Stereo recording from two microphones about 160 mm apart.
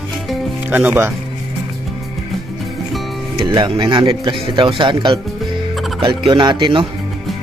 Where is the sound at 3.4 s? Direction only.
30° right (ahead or behind).